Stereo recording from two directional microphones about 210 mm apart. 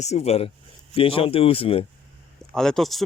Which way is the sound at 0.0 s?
30° left (ahead or behind).